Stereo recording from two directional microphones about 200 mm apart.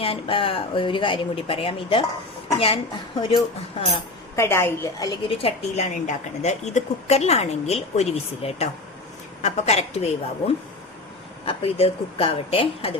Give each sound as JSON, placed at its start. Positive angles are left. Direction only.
{"t": 0.0, "sound": "speech", "side_deg": 25}
{"t": 4.4, "sound": "a woman's voice", "side_deg": 10}
{"t": 11.4, "sound": "speech", "side_deg": 30}